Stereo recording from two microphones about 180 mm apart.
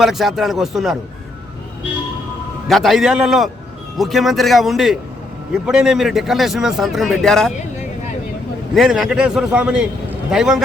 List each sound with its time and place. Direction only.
0.0 s a man's voice: centre (ahead or behind)
2.6 s a man's voice: centre (ahead or behind)
8.7 s a man's voice: centre (ahead or behind)